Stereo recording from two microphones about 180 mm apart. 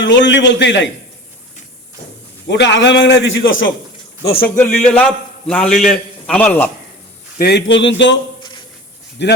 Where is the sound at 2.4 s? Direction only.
75° left (ahead or behind); by 3.7 s 90° left.